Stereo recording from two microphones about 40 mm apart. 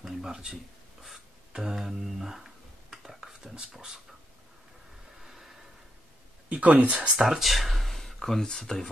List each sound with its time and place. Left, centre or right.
0.0 s a sound: centre
1.5 s dishes: centre
3.7 s speech: centre
5.2 s a sound: centre
6.5 s speech: right
7.2 s speech: centre